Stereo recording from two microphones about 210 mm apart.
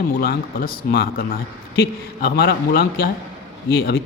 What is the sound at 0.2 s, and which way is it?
A man's voice, 45° left (ahead or behind).